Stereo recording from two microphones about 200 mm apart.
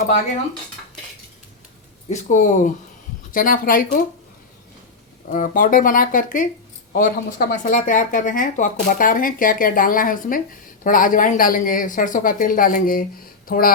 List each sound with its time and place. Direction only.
2.0 s speech: 35° left (ahead or behind)
5.3 s speech: 40° left (ahead or behind)